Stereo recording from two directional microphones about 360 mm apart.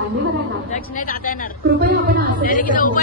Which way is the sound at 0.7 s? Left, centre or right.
Left.